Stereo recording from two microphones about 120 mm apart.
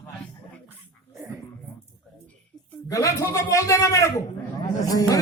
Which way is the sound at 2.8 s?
25° left (ahead or behind).